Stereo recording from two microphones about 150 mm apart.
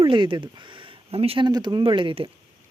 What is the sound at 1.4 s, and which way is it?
Speech, 30° right (ahead or behind).